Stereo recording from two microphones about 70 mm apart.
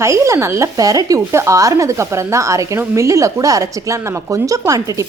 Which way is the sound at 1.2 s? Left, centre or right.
Right.